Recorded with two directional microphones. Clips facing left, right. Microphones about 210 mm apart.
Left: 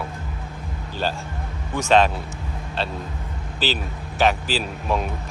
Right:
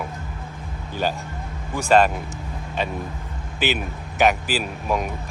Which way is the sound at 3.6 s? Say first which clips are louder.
Right 2 dB; 15° right (ahead or behind).